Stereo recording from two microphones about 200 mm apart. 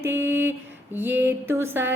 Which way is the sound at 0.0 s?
10° right (ahead or behind).